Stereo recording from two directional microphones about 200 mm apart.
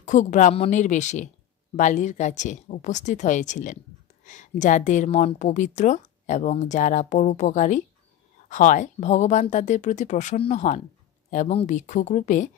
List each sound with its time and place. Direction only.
0.0 s a woman's voice: 35° left (ahead or behind)